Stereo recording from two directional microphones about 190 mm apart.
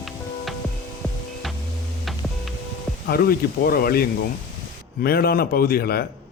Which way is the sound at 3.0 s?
55° left (ahead or behind).